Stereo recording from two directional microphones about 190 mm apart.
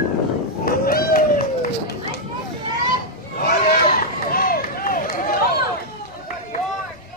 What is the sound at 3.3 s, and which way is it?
Run, 50° left (ahead or behind).